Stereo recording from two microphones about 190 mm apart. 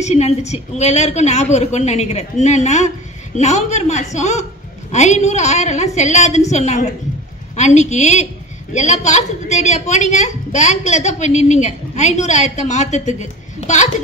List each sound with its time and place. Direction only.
0.0 s a woman's voice: 35° left (ahead or behind)